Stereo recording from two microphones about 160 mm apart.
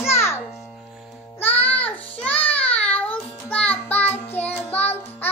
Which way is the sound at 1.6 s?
10° left (ahead or behind).